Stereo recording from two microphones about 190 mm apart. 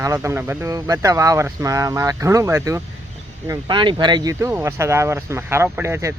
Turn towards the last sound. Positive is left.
turn(degrees=-15)  # may be behind; listen again after turning